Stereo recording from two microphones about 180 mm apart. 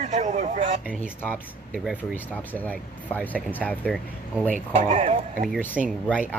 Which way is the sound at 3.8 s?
Centre (ahead or behind).